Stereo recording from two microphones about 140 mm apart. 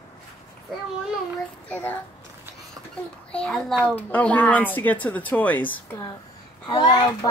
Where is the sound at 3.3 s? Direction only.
5° left (ahead or behind).